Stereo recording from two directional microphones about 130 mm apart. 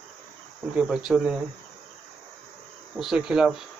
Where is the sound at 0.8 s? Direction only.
5° right (ahead or behind).